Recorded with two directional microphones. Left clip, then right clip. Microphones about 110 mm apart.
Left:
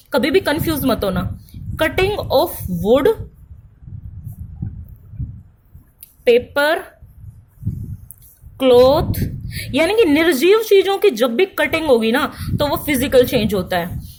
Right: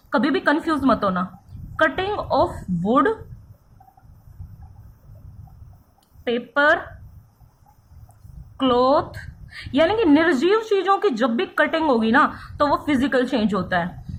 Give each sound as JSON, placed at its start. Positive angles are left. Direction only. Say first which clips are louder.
{"t": 0.1, "sound": "speech", "louder": "left 4 dB", "side_deg": 35}
{"t": 6.2, "sound": "speech", "louder": "left 5 dB", "side_deg": 45}
{"t": 8.5, "sound": "speech", "louder": "left 7 dB", "side_deg": 35}